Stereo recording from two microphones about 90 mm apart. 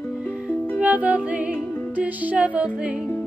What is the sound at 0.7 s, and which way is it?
Music, 20° right (ahead or behind).